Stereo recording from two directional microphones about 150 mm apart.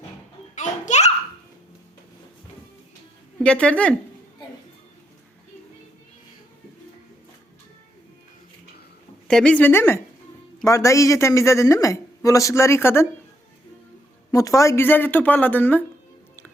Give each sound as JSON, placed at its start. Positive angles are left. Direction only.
{"t": 0.5, "sound": "children playing", "side_deg": 50}
{"t": 3.4, "sound": "speech", "side_deg": 5}
{"t": 9.2, "sound": "speech", "side_deg": 5}
{"t": 14.3, "sound": "speech", "side_deg": 20}